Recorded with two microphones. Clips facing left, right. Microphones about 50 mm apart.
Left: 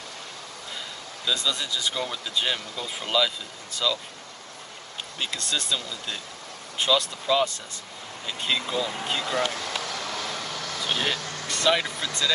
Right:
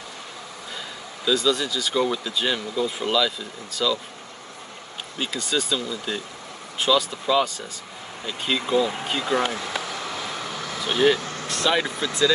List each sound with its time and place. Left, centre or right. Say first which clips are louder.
1.2 s speech: right 6 dB; centre
5.2 s speech: right 4 dB; centre
9.2 s vehicle: right 5 dB; right
11.4 s speech: right 1 dB; centre
11.8 s speech: right 6 dB; centre